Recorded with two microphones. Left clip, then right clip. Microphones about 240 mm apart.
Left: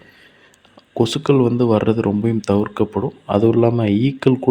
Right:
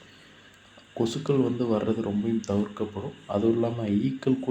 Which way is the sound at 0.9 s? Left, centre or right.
Left.